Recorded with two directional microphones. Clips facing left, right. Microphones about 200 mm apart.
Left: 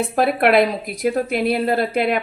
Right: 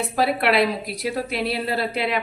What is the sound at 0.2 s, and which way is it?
A woman's voice, 50° left (ahead or behind).